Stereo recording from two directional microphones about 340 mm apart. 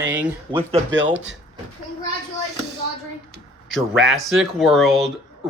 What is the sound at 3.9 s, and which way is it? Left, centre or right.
Speech, centre.